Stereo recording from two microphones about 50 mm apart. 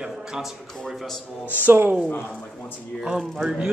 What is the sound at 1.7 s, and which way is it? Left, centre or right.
Speech, right.